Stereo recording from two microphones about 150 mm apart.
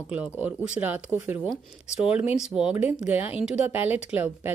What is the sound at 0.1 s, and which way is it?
A woman's voice, 10° right (ahead or behind).